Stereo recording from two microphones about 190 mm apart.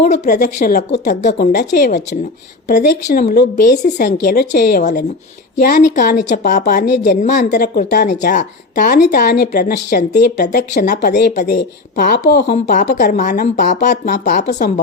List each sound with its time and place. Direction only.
0.0 s a woman's voice: 45° left (ahead or behind)
1.3 s a woman's voice: 55° left (ahead or behind)
7.5 s speech: 60° left (ahead or behind)
7.9 s a woman's voice: 40° left (ahead or behind); by 12.5 s 60° left (ahead or behind)
12.7 s speech: 40° left (ahead or behind)